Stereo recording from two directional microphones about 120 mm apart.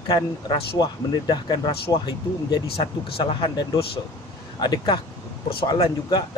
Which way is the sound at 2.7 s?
45° left (ahead or behind).